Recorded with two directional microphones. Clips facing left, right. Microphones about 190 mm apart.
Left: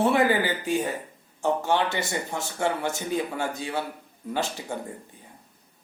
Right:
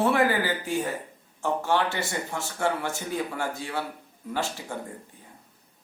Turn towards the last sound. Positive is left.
turn(degrees=20)  # may be behind; listen again after turning